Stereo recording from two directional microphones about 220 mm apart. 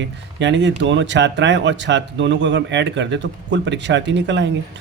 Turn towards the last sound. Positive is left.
turn(degrees=-55)  # may be behind; listen again after turning